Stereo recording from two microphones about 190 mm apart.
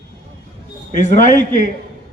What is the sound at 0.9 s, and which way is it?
Speech, 40° left (ahead or behind).